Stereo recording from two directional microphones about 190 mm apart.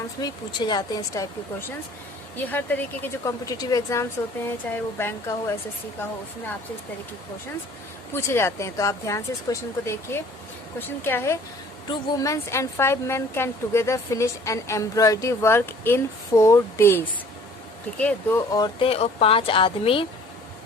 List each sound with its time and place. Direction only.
0.2 s a woman's voice: 20° left (ahead or behind)
8.1 s a woman's voice: 15° left (ahead or behind)
18.0 s speech: 10° left (ahead or behind); by 20.1 s 30° left (ahead or behind)